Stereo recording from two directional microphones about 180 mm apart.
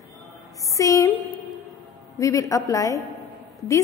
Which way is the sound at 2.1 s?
15° left (ahead or behind).